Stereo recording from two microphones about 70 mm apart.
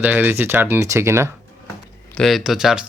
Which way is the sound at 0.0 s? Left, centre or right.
Right.